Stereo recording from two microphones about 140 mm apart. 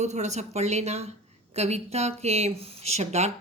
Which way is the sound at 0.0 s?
55° right (ahead or behind).